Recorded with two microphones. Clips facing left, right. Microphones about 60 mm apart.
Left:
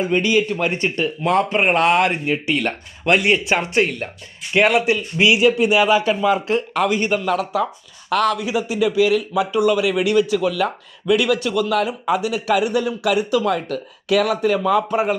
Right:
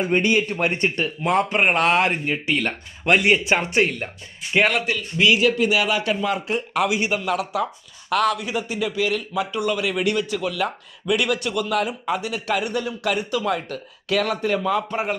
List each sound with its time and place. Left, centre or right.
0.2 s speech: right
0.5 s speech: centre
5.7 s speech: left
6.5 s speech: centre